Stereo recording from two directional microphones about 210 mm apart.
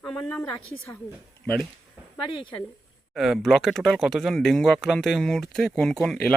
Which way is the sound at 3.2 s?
Centre (ahead or behind).